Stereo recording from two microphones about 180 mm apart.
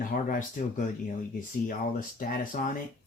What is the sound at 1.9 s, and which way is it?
Speech, 50° left (ahead or behind).